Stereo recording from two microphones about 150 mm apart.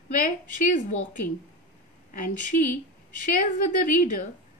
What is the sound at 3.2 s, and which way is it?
Speech, 60° left (ahead or behind).